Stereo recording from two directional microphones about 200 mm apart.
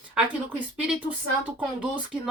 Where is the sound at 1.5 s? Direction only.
5° right (ahead or behind).